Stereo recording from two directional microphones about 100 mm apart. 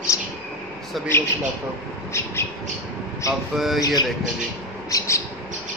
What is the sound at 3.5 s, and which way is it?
Speech, 5° right (ahead or behind).